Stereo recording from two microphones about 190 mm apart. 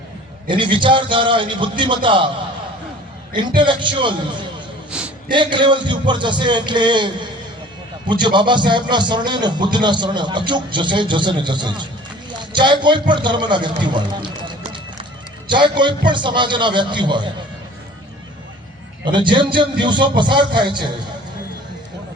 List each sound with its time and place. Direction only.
0.4 s a man's voice: 25° right (ahead or behind)
3.3 s a man's voice: 25° right (ahead or behind)
4.9 s a sound: 5° right (ahead or behind)
5.3 s a man's voice: 25° right (ahead or behind)
15.4 s a man's voice: 25° right (ahead or behind)
19.0 s a man's voice: 25° right (ahead or behind)